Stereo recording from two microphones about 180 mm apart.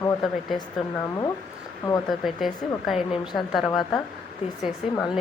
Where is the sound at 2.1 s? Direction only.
Centre (ahead or behind).